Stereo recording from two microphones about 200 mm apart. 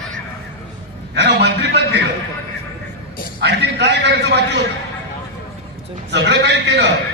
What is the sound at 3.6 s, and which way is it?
Speech, 60° right (ahead or behind).